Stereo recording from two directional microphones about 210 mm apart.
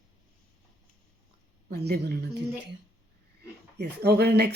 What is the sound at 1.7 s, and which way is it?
Speech, 50° right (ahead or behind).